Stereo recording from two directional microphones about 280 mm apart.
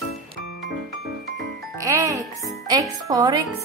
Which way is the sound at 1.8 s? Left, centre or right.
Centre.